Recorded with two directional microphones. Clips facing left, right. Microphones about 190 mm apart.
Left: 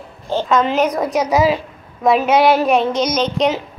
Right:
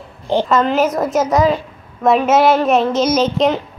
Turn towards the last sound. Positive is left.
turn(degrees=0)  # may be behind; listen again after turning